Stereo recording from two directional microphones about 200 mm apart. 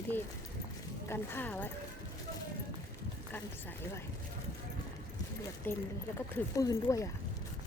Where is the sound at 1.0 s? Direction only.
10° left (ahead or behind).